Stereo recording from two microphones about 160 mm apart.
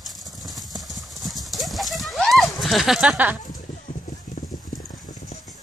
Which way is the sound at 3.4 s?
55° left (ahead or behind).